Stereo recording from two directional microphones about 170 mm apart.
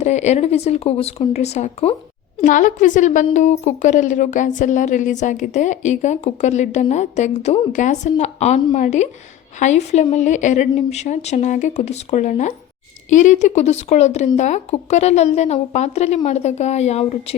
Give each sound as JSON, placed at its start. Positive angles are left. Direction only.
{"t": 0.0, "sound": "speech", "side_deg": 40}